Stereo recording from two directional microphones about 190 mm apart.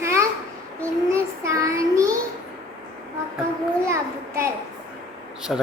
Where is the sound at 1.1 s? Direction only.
15° right (ahead or behind).